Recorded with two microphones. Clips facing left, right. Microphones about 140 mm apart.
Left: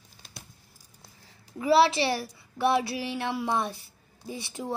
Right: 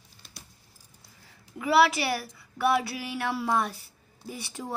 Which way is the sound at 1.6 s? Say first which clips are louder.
Left 1 dB; 30° left (ahead or behind).